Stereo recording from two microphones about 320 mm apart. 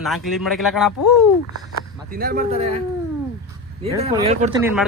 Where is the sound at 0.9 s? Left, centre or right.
Left.